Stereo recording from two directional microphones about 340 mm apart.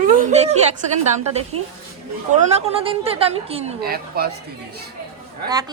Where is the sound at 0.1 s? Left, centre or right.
Right.